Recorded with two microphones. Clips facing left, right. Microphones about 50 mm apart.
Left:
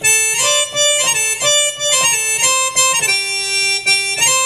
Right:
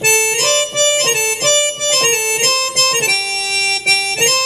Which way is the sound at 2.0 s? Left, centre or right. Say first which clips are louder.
Right 3 dB; right.